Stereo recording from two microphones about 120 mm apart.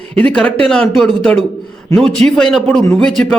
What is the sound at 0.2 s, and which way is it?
A man's voice, 10° left (ahead or behind).